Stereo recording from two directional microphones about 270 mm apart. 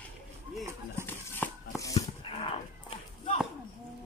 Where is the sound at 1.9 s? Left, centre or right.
Centre.